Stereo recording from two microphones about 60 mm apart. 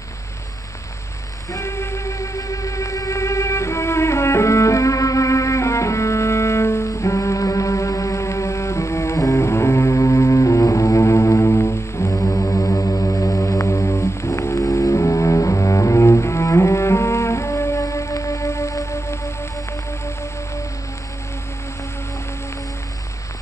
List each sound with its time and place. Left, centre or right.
1.5 s music: left